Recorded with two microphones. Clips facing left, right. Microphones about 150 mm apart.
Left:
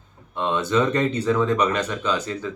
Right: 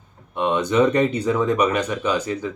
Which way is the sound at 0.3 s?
15° right (ahead or behind).